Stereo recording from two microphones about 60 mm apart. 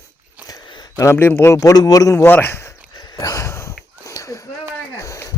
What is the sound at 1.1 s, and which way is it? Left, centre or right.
A man's voice, left.